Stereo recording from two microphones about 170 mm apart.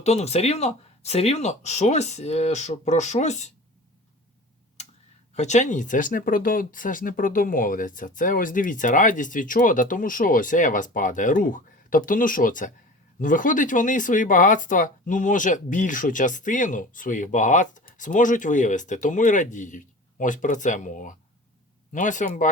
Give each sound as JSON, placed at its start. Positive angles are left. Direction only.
{"t": 0.0, "sound": "speech", "side_deg": 40}
{"t": 5.3, "sound": "speech", "side_deg": 40}